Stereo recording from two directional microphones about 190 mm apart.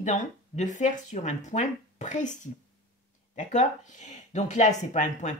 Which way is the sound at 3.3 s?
40° left (ahead or behind).